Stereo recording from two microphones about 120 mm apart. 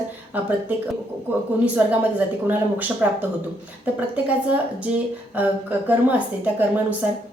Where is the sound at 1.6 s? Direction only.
10° right (ahead or behind).